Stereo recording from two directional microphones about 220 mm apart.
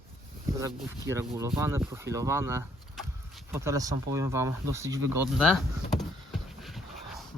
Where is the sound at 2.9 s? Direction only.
Centre (ahead or behind).